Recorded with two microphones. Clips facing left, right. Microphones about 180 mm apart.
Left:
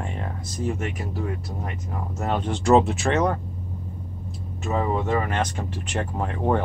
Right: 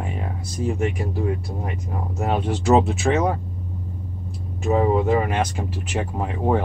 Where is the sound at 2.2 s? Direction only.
10° right (ahead or behind).